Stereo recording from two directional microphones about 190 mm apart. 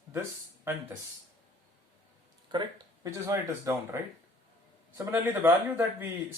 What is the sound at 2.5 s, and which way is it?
Speech, 25° right (ahead or behind).